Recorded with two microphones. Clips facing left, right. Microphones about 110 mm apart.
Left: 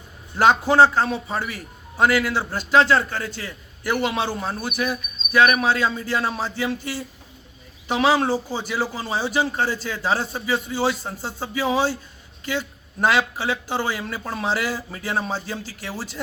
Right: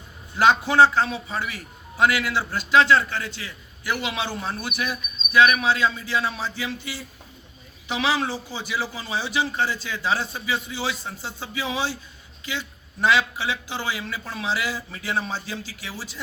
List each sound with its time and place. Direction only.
0.3 s a man's voice: 40° left (ahead or behind)
4.4 s a man's voice: 35° left (ahead or behind)